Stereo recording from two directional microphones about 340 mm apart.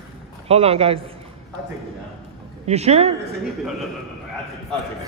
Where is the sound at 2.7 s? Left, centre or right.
Centre.